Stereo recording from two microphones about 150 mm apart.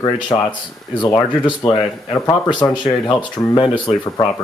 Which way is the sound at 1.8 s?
25° left (ahead or behind).